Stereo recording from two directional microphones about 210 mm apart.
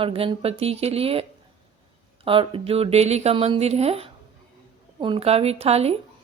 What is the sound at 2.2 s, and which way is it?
Speech, 25° right (ahead or behind).